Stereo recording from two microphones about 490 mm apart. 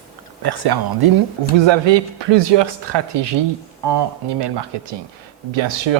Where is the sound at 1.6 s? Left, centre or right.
Right.